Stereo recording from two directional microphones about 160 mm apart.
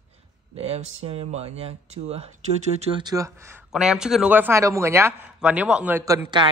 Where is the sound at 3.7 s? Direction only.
5° right (ahead or behind).